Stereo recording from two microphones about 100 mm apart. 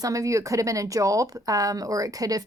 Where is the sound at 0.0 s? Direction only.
35° right (ahead or behind).